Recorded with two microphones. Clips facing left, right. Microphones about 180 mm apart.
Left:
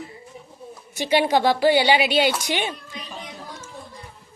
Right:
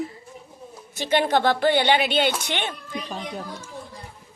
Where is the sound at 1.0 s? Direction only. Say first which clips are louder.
Left 1 dB; 10° left (ahead or behind).